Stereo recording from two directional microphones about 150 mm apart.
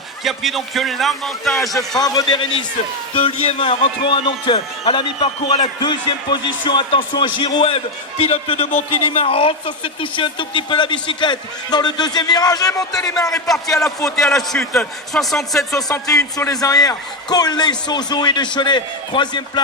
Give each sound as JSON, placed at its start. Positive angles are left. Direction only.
{"t": 0.3, "sound": "a man's voice", "side_deg": 0}
{"t": 2.0, "sound": "a man's voice", "side_deg": 25}
{"t": 13.2, "sound": "a man's voice", "side_deg": 5}
{"t": 15.7, "sound": "a man's voice", "side_deg": 25}